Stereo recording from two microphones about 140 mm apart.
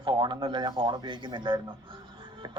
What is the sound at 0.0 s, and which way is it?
Speech, 35° right (ahead or behind).